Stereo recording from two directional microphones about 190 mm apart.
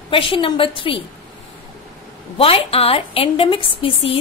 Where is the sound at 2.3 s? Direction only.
30° left (ahead or behind).